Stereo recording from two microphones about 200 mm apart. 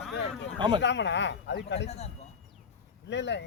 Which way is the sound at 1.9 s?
30° left (ahead or behind).